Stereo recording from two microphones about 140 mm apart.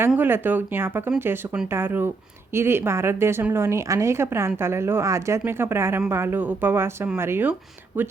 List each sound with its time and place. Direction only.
0.2 s a woman's voice: 15° right (ahead or behind)